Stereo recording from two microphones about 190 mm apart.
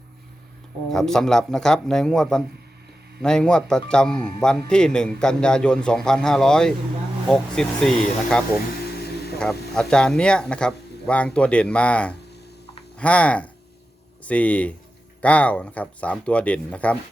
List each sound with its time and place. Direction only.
0.9 s speech: centre (ahead or behind)
9.0 s vehicle: 55° left (ahead or behind)
9.4 s speech: 5° left (ahead or behind)